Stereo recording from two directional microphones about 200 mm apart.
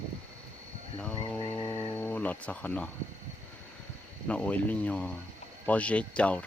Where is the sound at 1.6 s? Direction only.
25° left (ahead or behind).